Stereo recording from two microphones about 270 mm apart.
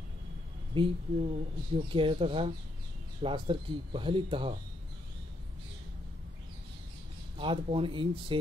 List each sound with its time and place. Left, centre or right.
0.7 s speech: centre
7.3 s speech: centre